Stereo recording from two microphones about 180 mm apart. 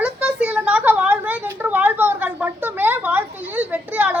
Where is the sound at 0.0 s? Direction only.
5° right (ahead or behind).